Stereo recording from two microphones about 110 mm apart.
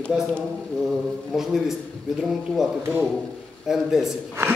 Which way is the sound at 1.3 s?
5° right (ahead or behind).